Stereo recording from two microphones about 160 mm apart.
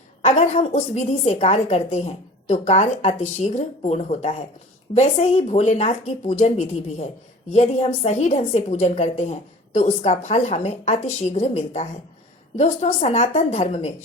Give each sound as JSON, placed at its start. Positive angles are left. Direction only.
{"t": 0.3, "sound": "a woman's voice", "side_deg": 45}